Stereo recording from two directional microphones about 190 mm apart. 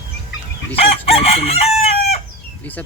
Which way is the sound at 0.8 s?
30° left (ahead or behind).